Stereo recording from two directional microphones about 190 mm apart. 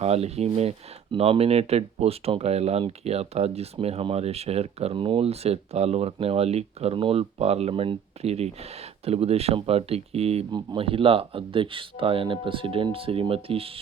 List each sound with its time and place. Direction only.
0.0 s speech: 35° right (ahead or behind)